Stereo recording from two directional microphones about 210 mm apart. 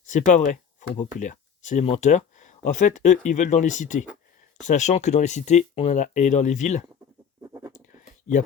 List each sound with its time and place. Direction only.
0.0 s speech: 35° left (ahead or behind)
7.4 s scratch: 15° right (ahead or behind)
7.7 s a sound: 35° left (ahead or behind)